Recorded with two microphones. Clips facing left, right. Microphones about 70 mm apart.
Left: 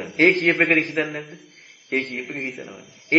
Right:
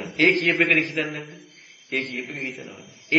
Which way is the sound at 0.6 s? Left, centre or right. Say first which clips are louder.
Left 1 dB; left.